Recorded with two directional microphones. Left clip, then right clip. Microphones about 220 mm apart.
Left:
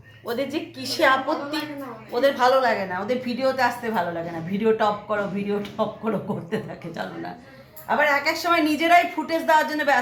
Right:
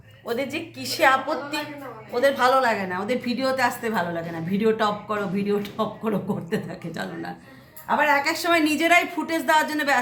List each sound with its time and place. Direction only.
0.3 s a woman's voice: 10° right (ahead or behind)